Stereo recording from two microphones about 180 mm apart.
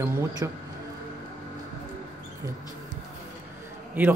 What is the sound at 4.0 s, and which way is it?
Speech, 10° right (ahead or behind).